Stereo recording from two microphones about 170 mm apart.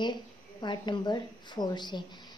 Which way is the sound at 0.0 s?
25° left (ahead or behind).